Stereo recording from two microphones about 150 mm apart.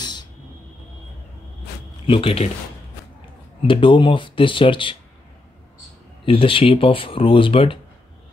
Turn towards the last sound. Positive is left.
turn(degrees=35)  # may be behind; listen again after turning